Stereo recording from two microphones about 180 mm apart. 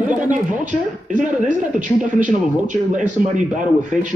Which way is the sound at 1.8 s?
45° right (ahead or behind).